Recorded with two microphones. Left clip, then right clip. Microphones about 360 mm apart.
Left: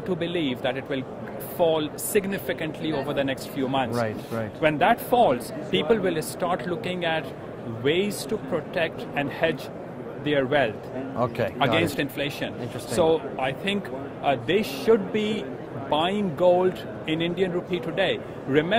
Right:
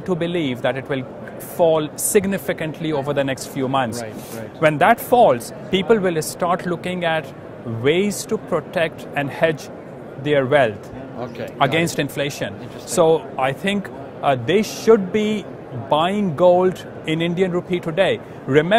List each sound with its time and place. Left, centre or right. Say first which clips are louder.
0.0 s speech: right 5 dB; right
11.1 s a man's voice: left 4 dB; left
11.5 s speech: right 8 dB; right